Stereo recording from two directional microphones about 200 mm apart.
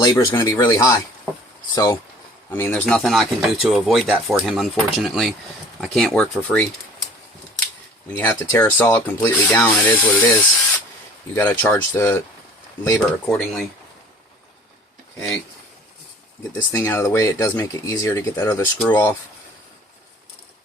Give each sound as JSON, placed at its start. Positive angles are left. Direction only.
{"t": 0.0, "sound": "speech", "side_deg": 20}
{"t": 8.1, "sound": "speech", "side_deg": 10}
{"t": 16.7, "sound": "speech", "side_deg": 15}